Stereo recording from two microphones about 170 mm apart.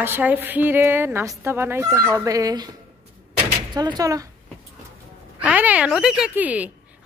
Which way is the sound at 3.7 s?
25° right (ahead or behind).